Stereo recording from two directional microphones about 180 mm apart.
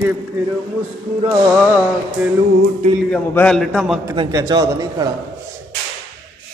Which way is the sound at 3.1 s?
5° left (ahead or behind).